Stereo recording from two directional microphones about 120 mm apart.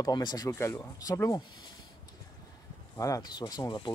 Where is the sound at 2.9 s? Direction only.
30° left (ahead or behind).